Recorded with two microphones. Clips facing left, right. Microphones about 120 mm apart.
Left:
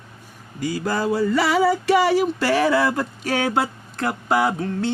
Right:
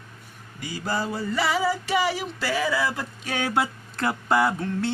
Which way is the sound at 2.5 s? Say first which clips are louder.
Left 6 dB; 60° left (ahead or behind).